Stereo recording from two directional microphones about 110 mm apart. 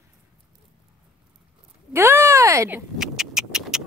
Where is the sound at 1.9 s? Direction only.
20° right (ahead or behind).